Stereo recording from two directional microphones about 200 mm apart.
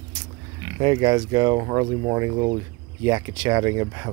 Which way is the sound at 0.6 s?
20° right (ahead or behind).